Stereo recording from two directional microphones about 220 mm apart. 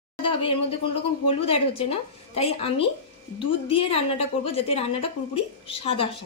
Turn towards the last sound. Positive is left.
turn(degrees=25)  # may be behind; listen again after turning